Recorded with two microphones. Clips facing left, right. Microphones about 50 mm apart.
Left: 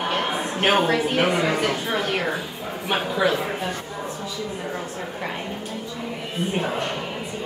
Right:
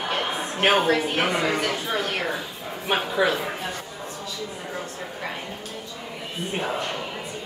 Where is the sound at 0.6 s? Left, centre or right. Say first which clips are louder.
Even; centre.